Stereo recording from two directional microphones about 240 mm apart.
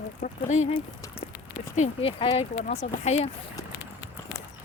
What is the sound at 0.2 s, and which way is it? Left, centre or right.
Speech, left.